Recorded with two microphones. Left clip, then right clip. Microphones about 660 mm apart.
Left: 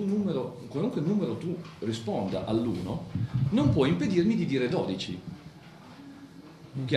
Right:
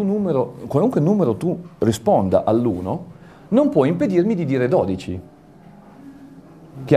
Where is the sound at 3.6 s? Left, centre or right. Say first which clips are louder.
Right 10 dB; right.